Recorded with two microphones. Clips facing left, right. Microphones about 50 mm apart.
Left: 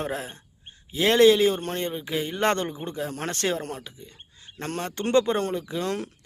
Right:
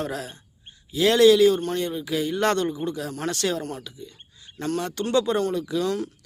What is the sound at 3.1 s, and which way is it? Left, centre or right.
Speech, left.